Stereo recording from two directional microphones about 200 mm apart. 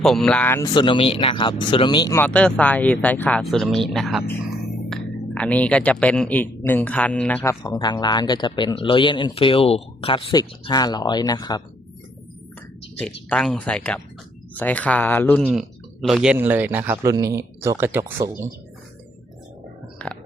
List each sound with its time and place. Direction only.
0.0 s speech: centre (ahead or behind)
0.7 s speech: 25° left (ahead or behind); by 7.5 s 5° left (ahead or behind)
7.6 s speech: 20° left (ahead or behind)
13.0 s speech: 5° left (ahead or behind)
15.4 s speech: centre (ahead or behind)
20.0 s a sound: 5° left (ahead or behind)